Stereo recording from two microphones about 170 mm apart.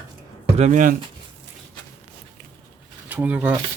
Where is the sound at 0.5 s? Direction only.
45° right (ahead or behind).